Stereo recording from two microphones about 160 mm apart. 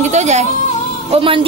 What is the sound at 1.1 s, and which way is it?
Speech, 35° right (ahead or behind).